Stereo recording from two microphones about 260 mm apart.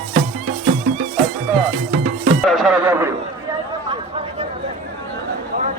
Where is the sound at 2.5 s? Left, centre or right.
Centre.